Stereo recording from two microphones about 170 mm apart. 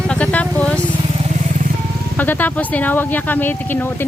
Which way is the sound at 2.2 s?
10° left (ahead or behind).